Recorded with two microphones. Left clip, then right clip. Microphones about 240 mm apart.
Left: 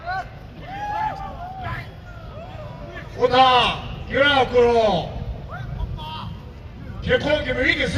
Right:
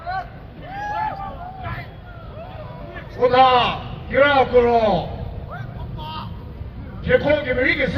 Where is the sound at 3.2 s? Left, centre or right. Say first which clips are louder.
Right 1 dB; left.